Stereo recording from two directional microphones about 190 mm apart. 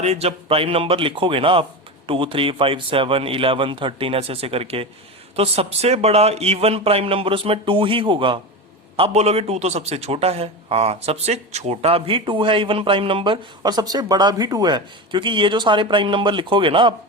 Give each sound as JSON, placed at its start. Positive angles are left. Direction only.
{"t": 0.0, "sound": "a man's voice", "side_deg": -35}